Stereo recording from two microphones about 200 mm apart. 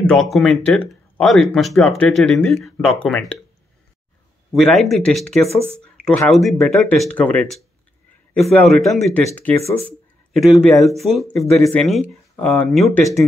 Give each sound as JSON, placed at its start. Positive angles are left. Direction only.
{"t": 0.0, "sound": "speech", "side_deg": 0}
{"t": 4.6, "sound": "speech", "side_deg": 0}